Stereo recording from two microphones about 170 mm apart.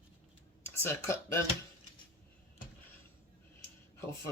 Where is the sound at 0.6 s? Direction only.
15° left (ahead or behind).